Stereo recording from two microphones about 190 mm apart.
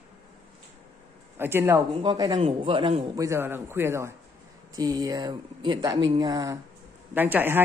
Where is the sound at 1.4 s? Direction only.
10° right (ahead or behind).